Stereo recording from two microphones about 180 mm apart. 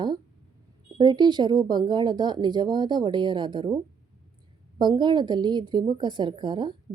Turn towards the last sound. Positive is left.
turn(degrees=-25)  # may be behind; listen again after turning